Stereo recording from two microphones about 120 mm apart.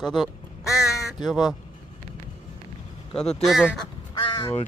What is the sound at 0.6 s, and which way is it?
Crow, 25° left (ahead or behind).